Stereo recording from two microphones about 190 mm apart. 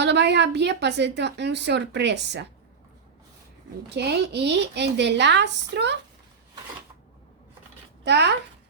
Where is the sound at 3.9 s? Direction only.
60° right (ahead or behind).